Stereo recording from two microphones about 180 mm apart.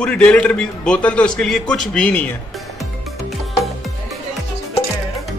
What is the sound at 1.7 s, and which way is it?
Music, 5° left (ahead or behind).